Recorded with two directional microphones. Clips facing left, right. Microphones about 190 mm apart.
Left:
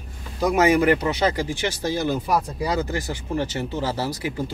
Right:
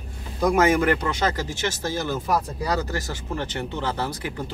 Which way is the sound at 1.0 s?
50° right (ahead or behind).